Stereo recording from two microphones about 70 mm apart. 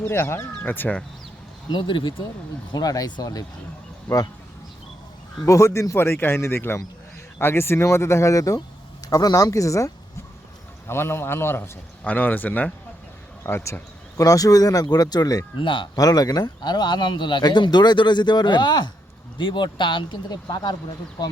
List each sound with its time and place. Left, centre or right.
0.0 s speech: left
2.7 s speech: left
5.4 s speech: left
9.0 s speech: left
10.8 s speech: left
12.0 s speech: left
13.4 s speech: left
14.2 s speech: left